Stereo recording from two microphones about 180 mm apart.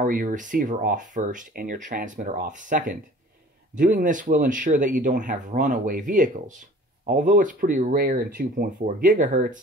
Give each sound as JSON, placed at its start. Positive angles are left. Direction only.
{"t": 0.0, "sound": "speech", "side_deg": -50}